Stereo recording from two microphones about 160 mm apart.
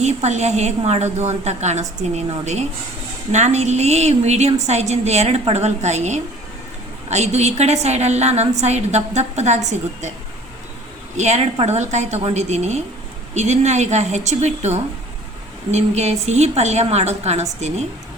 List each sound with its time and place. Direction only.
0.0 s a woman's voice: 45° right (ahead or behind)
11.2 s a woman's voice: 45° right (ahead or behind)